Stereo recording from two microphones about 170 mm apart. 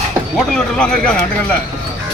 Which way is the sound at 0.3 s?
5° left (ahead or behind).